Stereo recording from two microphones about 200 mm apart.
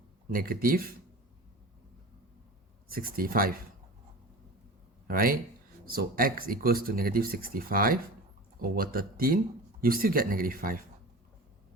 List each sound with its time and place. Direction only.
0.3 s speech: 45° right (ahead or behind)
2.9 s speech: 45° right (ahead or behind)
5.0 s speech: 45° right (ahead or behind)